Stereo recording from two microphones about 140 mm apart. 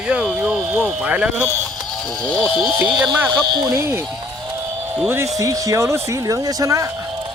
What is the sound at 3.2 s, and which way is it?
Speech, 30° right (ahead or behind).